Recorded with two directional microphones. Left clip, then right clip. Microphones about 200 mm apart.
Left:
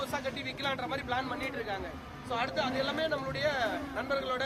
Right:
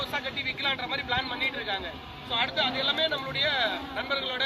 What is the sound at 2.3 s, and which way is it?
Speech, 15° left (ahead or behind).